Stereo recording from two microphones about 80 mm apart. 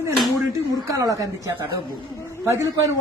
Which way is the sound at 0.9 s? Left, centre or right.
Right.